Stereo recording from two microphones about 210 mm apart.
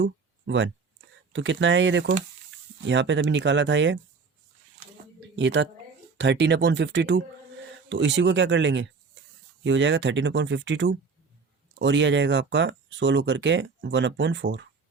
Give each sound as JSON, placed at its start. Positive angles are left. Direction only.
{"t": 0.0, "sound": "a sound", "side_deg": -60}
{"t": 1.3, "sound": "speech", "side_deg": -60}
{"t": 5.4, "sound": "speech", "side_deg": -60}